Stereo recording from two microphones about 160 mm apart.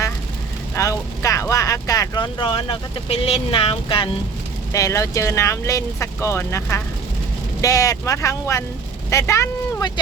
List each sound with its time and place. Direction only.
0.8 s speech: 20° left (ahead or behind)
4.7 s speech: 20° left (ahead or behind)